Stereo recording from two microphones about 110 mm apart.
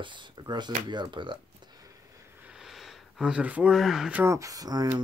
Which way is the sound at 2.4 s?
5° right (ahead or behind).